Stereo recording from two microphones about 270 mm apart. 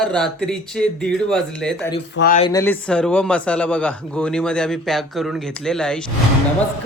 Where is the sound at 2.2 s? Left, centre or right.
Left.